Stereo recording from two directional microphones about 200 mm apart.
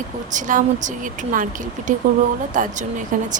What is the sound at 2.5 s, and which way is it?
Speech, 40° right (ahead or behind).